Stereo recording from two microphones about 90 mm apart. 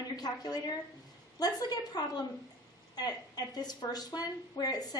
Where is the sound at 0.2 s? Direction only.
45° left (ahead or behind).